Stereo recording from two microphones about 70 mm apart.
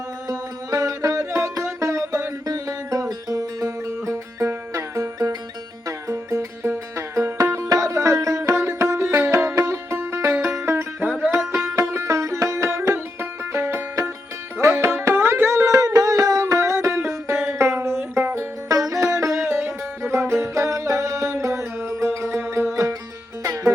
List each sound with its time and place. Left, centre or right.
0.3 s music: right
18.7 s music: right
22.7 s music: right